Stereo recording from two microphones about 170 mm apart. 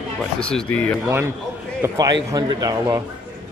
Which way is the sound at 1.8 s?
20° right (ahead or behind).